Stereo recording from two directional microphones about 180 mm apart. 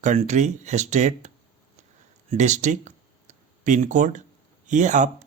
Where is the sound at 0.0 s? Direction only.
40° right (ahead or behind).